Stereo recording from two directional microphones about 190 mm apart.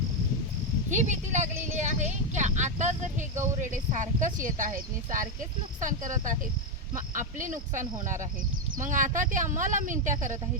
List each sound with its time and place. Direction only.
0.9 s a woman's voice: 40° right (ahead or behind)